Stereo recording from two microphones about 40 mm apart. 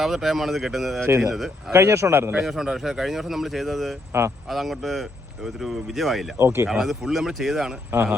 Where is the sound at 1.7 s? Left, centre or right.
Right.